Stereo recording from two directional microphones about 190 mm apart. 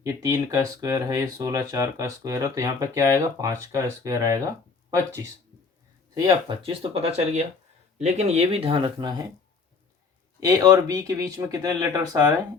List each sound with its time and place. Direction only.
0.0 s speech: 15° right (ahead or behind)
10.4 s speech: 20° right (ahead or behind)